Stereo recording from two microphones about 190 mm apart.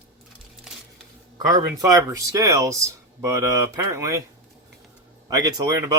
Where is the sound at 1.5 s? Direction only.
20° right (ahead or behind).